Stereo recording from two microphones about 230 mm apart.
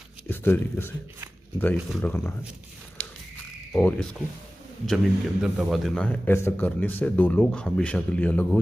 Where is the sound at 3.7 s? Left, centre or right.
Centre.